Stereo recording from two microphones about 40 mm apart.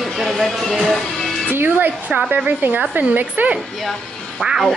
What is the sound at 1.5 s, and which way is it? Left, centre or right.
Speech, right.